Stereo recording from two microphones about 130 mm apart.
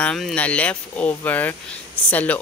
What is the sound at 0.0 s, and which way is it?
Speech, 5° left (ahead or behind).